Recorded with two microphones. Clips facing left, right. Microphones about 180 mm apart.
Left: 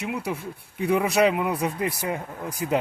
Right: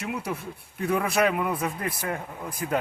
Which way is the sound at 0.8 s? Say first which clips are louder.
Left 3 dB; 15° left (ahead or behind).